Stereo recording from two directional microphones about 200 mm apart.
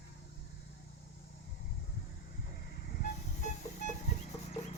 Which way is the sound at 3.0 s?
40° left (ahead or behind).